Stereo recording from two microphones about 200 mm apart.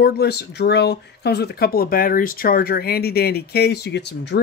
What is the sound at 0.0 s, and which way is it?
Speech, 55° left (ahead or behind).